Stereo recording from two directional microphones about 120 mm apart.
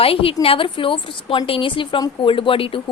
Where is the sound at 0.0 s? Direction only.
50° left (ahead or behind).